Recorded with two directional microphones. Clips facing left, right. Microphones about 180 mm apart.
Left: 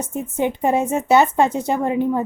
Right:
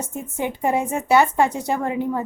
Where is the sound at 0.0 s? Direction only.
20° left (ahead or behind).